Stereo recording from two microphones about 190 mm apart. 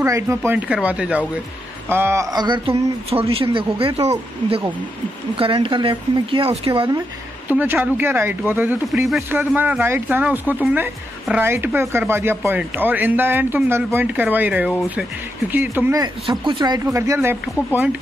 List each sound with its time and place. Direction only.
0.0 s a woman's voice: 15° right (ahead or behind)
7.4 s a woman's voice: 10° right (ahead or behind)